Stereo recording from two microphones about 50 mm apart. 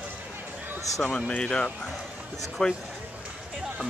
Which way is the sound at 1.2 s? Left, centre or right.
Left.